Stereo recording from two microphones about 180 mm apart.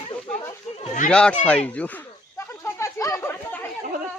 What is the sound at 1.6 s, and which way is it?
Chatter, 10° left (ahead or behind).